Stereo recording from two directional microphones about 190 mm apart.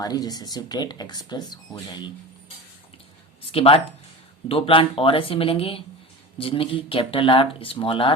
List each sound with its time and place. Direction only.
0.0 s speech: 20° left (ahead or behind)
3.5 s speech: 30° left (ahead or behind)